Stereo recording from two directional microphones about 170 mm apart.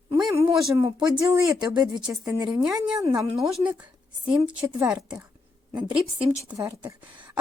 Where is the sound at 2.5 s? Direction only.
5° right (ahead or behind).